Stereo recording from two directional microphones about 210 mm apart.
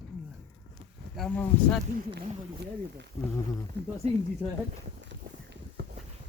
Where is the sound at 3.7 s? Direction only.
50° right (ahead or behind).